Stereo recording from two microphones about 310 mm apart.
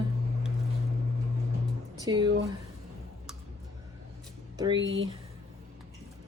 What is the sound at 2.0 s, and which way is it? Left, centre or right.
Speech, centre.